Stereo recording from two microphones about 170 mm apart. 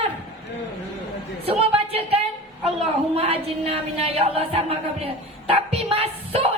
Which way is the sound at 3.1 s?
35° right (ahead or behind).